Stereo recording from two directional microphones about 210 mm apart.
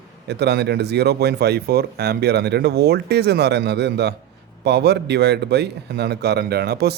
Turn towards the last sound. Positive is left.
turn(degrees=-50)  # may be behind; listen again after turning